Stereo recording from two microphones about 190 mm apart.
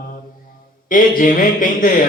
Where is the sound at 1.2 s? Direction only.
45° left (ahead or behind).